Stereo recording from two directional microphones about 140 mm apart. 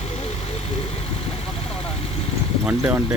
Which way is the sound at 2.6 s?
10° right (ahead or behind).